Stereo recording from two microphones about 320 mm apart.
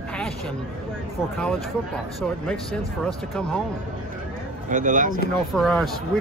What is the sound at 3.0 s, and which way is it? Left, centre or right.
Speech, centre.